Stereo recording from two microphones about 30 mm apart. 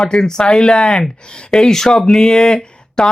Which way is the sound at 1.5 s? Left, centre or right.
Centre.